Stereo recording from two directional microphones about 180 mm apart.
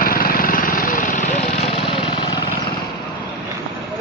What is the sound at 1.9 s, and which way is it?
Lawn mower, 25° left (ahead or behind).